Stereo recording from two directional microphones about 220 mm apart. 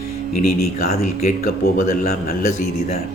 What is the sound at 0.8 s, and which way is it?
Speech, 45° left (ahead or behind).